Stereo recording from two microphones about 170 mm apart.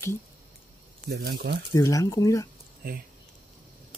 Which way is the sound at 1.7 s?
20° left (ahead or behind).